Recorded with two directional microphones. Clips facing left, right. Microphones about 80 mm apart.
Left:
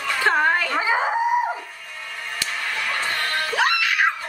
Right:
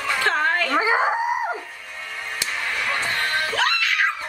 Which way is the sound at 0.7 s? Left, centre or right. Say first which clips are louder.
Right 2 dB; centre.